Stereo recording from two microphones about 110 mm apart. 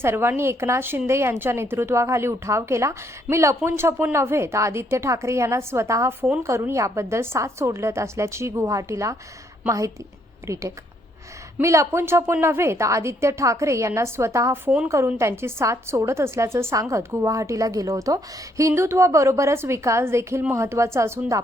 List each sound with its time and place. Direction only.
0.0 s speech: 20° right (ahead or behind)